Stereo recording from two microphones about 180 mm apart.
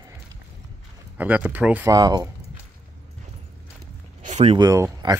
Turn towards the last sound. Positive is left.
turn(degrees=-20)  # may be behind; listen again after turning